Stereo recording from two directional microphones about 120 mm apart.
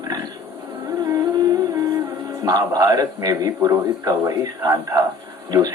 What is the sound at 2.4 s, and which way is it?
A man's voice, 30° right (ahead or behind).